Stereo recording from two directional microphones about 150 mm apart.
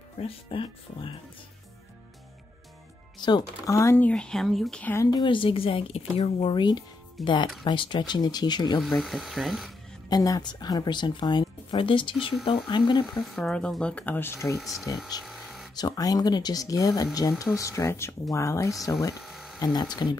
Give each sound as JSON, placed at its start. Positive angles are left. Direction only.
{"t": 0.2, "sound": "speech", "side_deg": 35}
{"t": 3.2, "sound": "speech", "side_deg": 30}
{"t": 4.9, "sound": "speech", "side_deg": 25}
{"t": 7.2, "sound": "speech", "side_deg": 0}
{"t": 7.6, "sound": "speech", "side_deg": 35}
{"t": 8.8, "sound": "speech", "side_deg": 0}
{"t": 10.0, "sound": "speech", "side_deg": 25}
{"t": 13.1, "sound": "speech", "side_deg": 0}
{"t": 14.6, "sound": "speech", "side_deg": 0}
{"t": 15.2, "sound": "a sound", "side_deg": 0}
{"t": 15.7, "sound": "speech", "side_deg": 25}
{"t": 19.2, "sound": "a sound", "side_deg": 0}
{"t": 19.6, "sound": "speech", "side_deg": 25}